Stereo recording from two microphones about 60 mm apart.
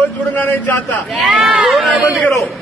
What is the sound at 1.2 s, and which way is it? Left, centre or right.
Speech, centre.